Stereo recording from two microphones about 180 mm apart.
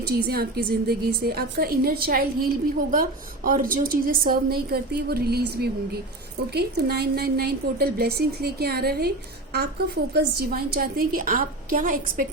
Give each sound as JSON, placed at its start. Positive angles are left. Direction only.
{"t": 0.3, "sound": "a woman's voice", "side_deg": -60}